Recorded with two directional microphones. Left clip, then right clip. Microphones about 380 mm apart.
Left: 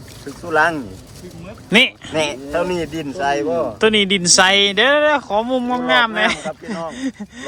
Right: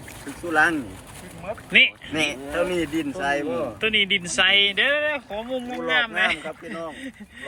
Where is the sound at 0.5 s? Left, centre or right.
Left.